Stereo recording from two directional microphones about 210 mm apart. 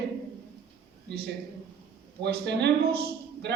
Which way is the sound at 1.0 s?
50° right (ahead or behind).